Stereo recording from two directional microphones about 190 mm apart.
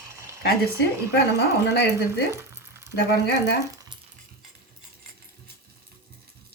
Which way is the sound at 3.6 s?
20° right (ahead or behind).